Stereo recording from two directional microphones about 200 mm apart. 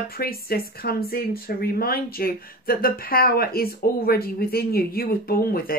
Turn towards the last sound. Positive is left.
turn(degrees=50)  # may be behind; listen again after turning